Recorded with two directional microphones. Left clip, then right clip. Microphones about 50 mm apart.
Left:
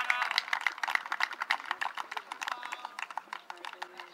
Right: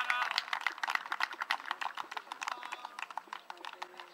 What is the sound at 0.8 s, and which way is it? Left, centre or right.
Typing, centre.